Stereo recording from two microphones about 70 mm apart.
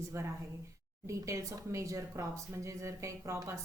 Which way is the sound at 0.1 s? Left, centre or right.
Right.